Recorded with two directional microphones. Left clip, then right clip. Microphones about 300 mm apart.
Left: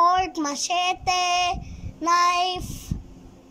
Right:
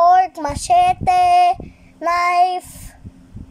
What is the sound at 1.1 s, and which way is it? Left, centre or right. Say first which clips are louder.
Child singing: right 10 dB; centre.